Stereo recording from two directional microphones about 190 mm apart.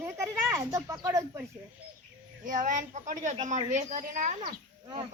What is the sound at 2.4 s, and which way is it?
Speech, 45° right (ahead or behind).